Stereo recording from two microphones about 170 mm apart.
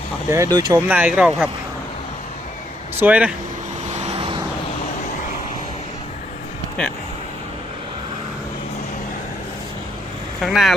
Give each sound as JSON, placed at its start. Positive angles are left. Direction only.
{"t": 0.3, "sound": "speech", "side_deg": -15}
{"t": 0.9, "sound": "speech", "side_deg": -10}
{"t": 3.0, "sound": "speech", "side_deg": -10}
{"t": 3.8, "sound": "vehicle", "side_deg": -40}
{"t": 10.4, "sound": "speech", "side_deg": 0}